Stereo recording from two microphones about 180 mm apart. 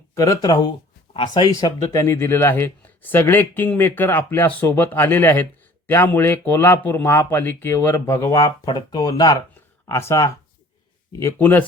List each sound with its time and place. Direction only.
0.1 s speech: 15° left (ahead or behind)